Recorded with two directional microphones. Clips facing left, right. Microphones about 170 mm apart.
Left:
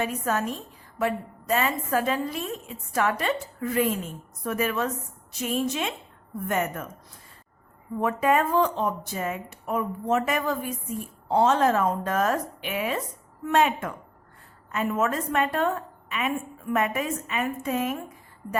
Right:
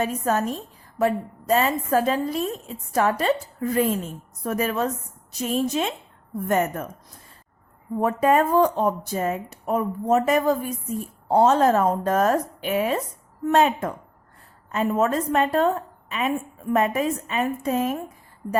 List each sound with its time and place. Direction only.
0.0 s a woman's voice: 40° right (ahead or behind)
8.0 s a woman's voice: 35° right (ahead or behind)